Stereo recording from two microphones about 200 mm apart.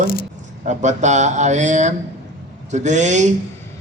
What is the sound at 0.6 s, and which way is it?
A man's voice, 35° right (ahead or behind).